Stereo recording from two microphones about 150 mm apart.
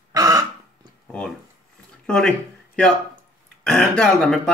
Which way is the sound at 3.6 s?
5° left (ahead or behind).